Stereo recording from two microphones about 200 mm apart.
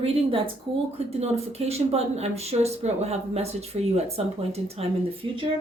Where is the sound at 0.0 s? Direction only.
25° right (ahead or behind).